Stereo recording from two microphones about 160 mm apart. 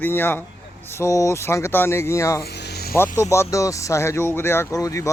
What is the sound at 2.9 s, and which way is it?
Speech, 15° left (ahead or behind).